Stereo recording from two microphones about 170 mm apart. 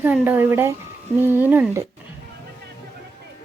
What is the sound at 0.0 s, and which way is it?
A woman's voice, 10° right (ahead or behind).